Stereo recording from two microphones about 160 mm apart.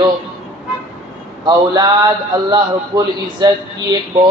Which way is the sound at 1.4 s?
25° right (ahead or behind).